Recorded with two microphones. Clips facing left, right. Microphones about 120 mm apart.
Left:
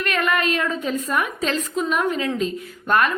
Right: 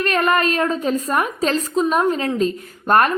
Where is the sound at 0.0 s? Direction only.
40° right (ahead or behind).